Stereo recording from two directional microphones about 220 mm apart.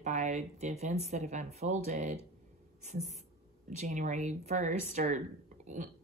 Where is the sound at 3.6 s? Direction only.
40° right (ahead or behind).